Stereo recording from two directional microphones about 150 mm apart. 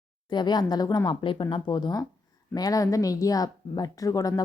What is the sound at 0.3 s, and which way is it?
Speech, 30° left (ahead or behind).